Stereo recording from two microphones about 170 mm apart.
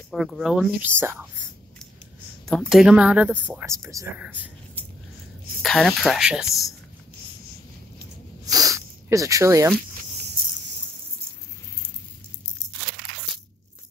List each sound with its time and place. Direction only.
0.1 s speech: centre (ahead or behind)
0.8 s speech: 15° right (ahead or behind)
2.6 s speech: 5° right (ahead or behind)
5.6 s speech: 5° left (ahead or behind)
8.5 s a sound: 20° right (ahead or behind)